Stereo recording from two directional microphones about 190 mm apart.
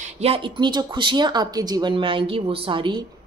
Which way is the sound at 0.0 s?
30° right (ahead or behind).